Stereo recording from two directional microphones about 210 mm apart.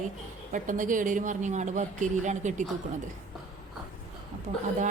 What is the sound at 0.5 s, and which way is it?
A woman's voice, 40° right (ahead or behind).